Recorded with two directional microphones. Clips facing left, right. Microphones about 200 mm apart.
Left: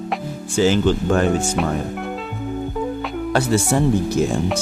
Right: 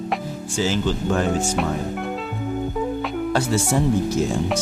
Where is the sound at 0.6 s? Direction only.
60° left (ahead or behind).